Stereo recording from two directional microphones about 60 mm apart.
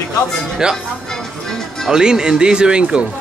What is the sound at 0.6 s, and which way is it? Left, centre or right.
Speech, centre.